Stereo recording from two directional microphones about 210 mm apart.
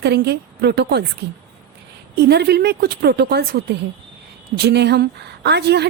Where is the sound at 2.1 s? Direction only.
50° right (ahead or behind).